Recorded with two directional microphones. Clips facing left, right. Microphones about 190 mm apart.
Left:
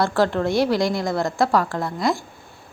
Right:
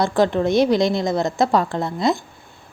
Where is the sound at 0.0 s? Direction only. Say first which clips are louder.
Right 2 dB; 20° right (ahead or behind).